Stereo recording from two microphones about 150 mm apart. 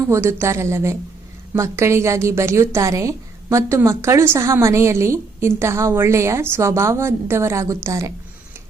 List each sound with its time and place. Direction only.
0.1 s a woman's voice: 15° right (ahead or behind)